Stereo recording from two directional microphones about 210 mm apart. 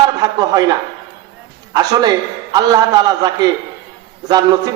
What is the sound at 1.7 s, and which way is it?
A man's voice, 20° right (ahead or behind).